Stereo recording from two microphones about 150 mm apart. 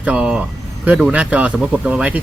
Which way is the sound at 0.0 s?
10° right (ahead or behind).